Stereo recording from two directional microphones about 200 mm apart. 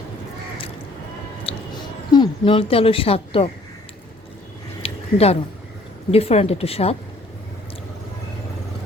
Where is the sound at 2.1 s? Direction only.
25° left (ahead or behind).